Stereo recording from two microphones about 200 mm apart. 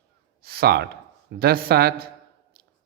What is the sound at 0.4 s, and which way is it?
A man's voice, 50° right (ahead or behind).